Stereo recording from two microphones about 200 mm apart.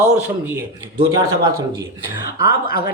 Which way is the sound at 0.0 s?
10° right (ahead or behind).